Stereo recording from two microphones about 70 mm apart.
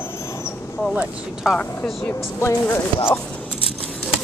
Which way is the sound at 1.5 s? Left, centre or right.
Centre.